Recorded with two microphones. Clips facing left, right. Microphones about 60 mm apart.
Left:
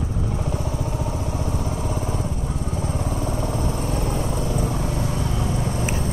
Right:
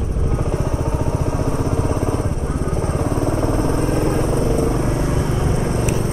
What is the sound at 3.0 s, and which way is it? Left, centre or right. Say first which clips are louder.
Vehicle: right 6 dB; right.